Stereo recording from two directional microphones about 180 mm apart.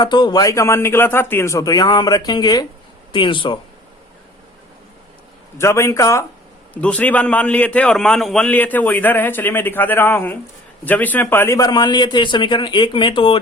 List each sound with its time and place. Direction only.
0.0 s speech: 25° left (ahead or behind)
5.5 s a man's voice: 15° left (ahead or behind)